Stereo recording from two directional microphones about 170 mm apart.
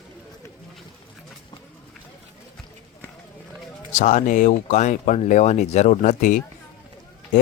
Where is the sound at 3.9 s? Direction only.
45° left (ahead or behind).